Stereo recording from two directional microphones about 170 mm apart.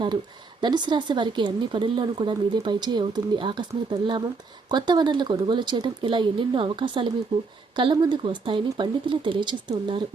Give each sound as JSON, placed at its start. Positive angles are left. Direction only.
{"t": 0.6, "sound": "speech", "side_deg": -25}